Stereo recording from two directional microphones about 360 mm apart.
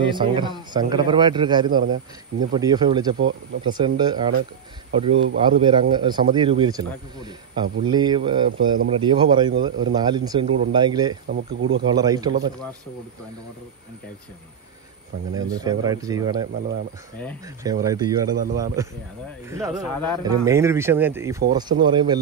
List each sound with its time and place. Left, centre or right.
0.0 s a man's voice: centre
5.1 s speech: right
5.4 s a man's voice: centre
15.3 s a man's voice: centre
17.8 s a man's voice: centre
20.2 s a man's voice: centre